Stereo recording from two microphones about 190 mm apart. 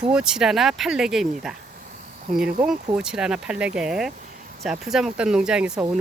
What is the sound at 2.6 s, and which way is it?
Speech, 5° right (ahead or behind).